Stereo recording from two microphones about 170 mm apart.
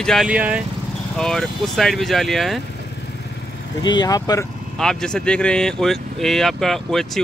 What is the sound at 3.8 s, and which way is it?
Speech, 25° left (ahead or behind).